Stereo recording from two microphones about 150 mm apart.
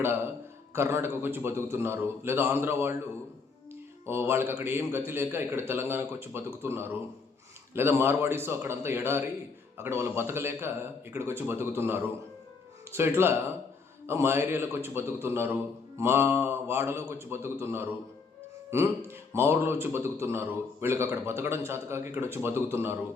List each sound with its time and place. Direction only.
0.7 s a man's voice: 15° right (ahead or behind)
4.0 s a man's voice: 15° right (ahead or behind)